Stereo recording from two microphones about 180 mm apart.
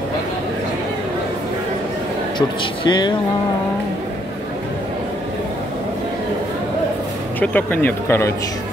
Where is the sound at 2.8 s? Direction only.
25° left (ahead or behind).